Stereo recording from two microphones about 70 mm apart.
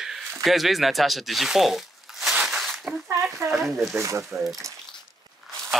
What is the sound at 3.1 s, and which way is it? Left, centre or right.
Speech, right.